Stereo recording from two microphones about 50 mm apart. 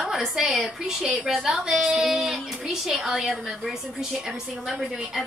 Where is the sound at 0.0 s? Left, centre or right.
Centre.